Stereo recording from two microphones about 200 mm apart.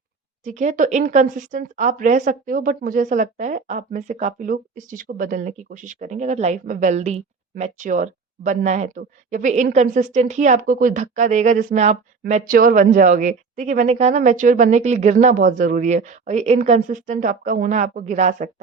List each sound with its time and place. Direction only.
0.4 s speech: 40° right (ahead or behind)